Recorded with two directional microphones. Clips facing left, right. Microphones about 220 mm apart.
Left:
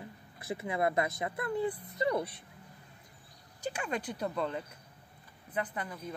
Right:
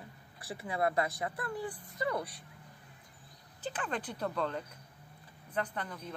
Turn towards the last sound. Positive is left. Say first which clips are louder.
# left 1 dB
turn(degrees=5)  # may be behind; listen again after turning